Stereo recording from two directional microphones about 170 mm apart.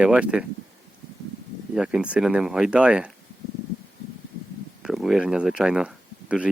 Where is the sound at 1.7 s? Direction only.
5° right (ahead or behind).